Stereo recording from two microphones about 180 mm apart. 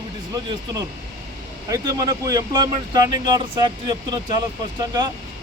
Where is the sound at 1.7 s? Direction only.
20° right (ahead or behind).